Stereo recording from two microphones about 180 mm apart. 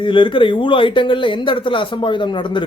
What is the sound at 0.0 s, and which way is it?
Speech, 25° left (ahead or behind).